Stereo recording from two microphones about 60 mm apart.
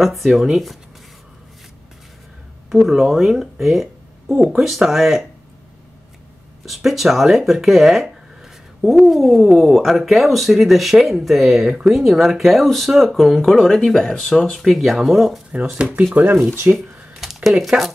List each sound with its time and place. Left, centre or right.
0.0 s speech: centre
2.7 s speech: centre
3.6 s a sound: centre
4.5 s speech: centre
6.7 s speech: centre
16.2 s speech: right
16.7 s a sound: centre